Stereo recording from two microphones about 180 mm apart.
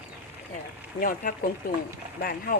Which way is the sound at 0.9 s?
50° left (ahead or behind).